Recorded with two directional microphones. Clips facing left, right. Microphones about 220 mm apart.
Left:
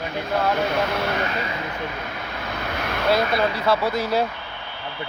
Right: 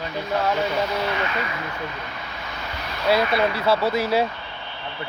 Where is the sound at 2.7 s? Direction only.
55° left (ahead or behind).